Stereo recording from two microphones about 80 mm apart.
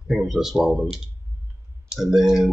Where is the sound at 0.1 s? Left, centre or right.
Centre.